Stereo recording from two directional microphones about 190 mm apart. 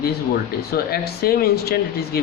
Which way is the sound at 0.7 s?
55° left (ahead or behind).